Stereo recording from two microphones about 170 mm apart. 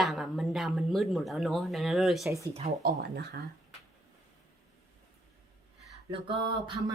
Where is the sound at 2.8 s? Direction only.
80° right.